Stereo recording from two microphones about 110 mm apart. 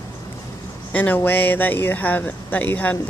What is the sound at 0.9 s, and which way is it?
Speech, 15° left (ahead or behind).